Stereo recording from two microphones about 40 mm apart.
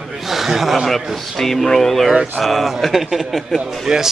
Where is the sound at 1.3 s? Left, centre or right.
Centre.